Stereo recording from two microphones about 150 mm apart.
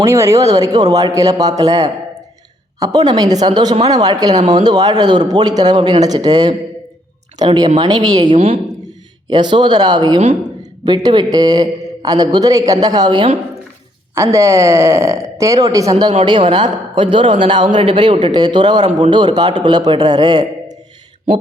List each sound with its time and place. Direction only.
0.0 s a man's voice: 20° right (ahead or behind)
9.3 s a man's voice: 30° right (ahead or behind)
14.2 s a man's voice: 20° right (ahead or behind)
18.9 s speech: 45° right (ahead or behind)
19.1 s a man's voice: 30° right (ahead or behind)